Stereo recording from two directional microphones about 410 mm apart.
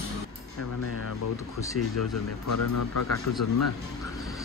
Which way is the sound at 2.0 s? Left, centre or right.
Left.